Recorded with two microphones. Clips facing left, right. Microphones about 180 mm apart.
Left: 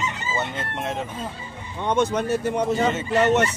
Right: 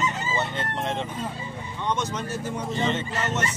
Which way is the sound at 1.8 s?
60° left (ahead or behind).